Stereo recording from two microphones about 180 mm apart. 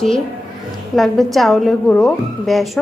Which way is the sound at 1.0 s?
Centre (ahead or behind).